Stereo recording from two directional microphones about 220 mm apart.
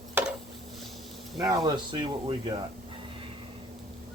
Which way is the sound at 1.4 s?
15° right (ahead or behind).